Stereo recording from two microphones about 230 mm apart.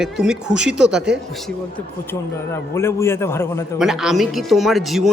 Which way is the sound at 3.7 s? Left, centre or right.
Centre.